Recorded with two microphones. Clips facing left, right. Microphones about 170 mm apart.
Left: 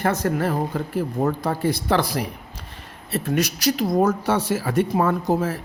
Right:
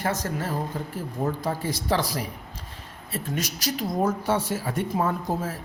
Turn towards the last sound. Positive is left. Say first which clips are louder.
# left 6 dB
turn(degrees=75)  # may be behind; listen again after turning